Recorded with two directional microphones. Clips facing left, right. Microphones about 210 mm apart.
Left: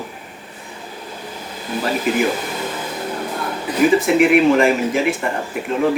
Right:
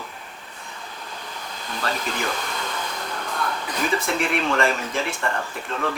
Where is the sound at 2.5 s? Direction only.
20° left (ahead or behind).